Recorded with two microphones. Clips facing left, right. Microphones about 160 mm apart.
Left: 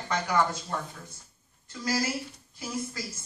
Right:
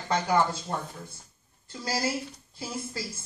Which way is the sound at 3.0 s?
30° right (ahead or behind).